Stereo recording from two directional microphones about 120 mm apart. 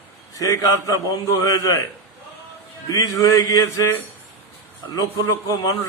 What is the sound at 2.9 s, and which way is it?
A man's voice, 25° left (ahead or behind).